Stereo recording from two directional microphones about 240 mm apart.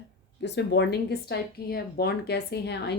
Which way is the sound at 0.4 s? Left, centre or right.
Left.